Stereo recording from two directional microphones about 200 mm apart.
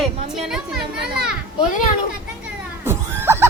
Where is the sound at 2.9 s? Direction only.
10° right (ahead or behind).